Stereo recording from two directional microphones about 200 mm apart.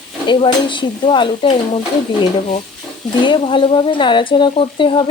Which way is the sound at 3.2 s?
25° left (ahead or behind).